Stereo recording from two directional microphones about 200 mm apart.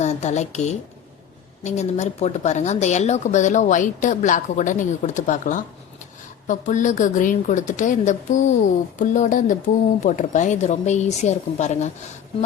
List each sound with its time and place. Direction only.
0.0 s a woman's voice: 35° left (ahead or behind)